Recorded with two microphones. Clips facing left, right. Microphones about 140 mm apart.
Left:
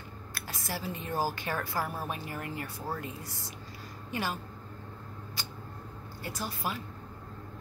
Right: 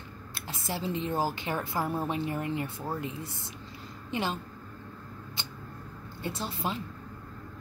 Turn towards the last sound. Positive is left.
turn(degrees=-25)  # may be behind; listen again after turning